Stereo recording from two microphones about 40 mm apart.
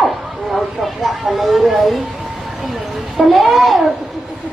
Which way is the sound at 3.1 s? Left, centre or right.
Centre.